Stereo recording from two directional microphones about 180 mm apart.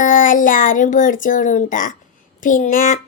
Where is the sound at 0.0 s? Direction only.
50° left (ahead or behind).